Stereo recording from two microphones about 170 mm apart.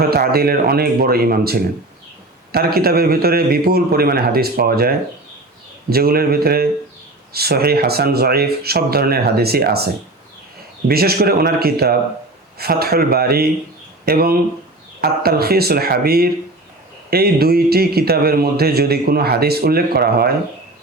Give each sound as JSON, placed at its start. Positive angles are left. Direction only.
{"t": 0.1, "sound": "a man's voice", "side_deg": -65}